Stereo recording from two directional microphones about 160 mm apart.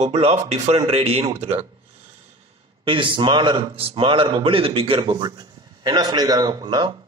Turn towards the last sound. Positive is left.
turn(degrees=-25)  # may be behind; listen again after turning